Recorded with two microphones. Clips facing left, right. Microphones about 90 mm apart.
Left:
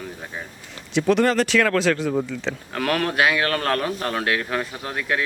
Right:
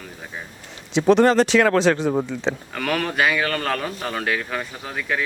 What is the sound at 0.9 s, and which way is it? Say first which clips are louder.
Speech: right 3 dB; 20° right (ahead or behind).